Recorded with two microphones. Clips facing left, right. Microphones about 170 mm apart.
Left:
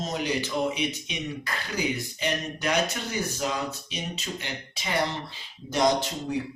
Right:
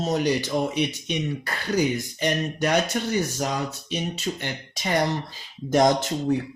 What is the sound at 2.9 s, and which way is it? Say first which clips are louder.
Speech: right 6 dB; 50° right (ahead or behind).